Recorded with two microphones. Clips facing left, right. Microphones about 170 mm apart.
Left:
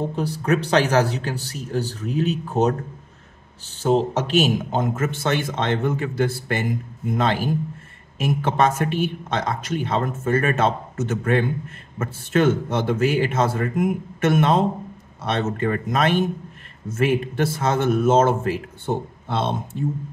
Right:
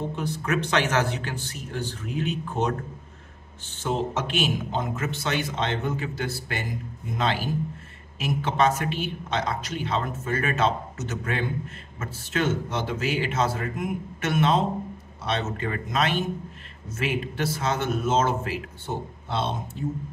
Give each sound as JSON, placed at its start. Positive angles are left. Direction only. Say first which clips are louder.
{"t": 0.1, "sound": "a man's voice", "louder": "left 5 dB", "side_deg": 35}
{"t": 3.7, "sound": "a woman's voice", "louder": "left 7 dB", "side_deg": 35}